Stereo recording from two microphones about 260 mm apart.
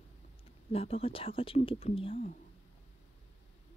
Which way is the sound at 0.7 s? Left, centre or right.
Left.